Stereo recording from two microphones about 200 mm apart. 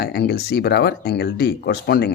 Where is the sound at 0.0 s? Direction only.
55° left (ahead or behind).